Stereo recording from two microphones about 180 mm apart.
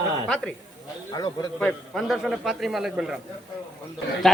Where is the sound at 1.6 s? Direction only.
5° left (ahead or behind).